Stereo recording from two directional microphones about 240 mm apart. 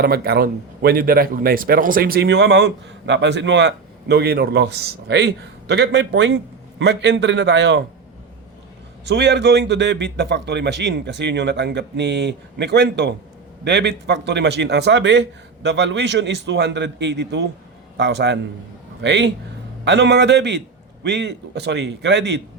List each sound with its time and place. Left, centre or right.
0.0 s a man's voice: right
9.0 s a man's voice: right